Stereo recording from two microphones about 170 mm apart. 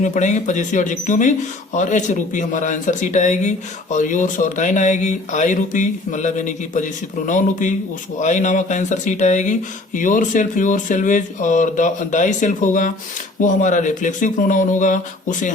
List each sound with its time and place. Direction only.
0.0 s speech: 45° left (ahead or behind)